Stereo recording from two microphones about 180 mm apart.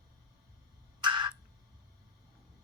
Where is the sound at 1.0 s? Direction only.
25° right (ahead or behind).